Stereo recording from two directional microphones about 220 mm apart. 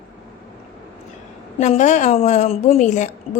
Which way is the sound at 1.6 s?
30° left (ahead or behind).